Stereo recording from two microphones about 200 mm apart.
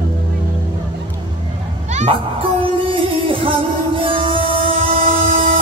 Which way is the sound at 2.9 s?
25° right (ahead or behind).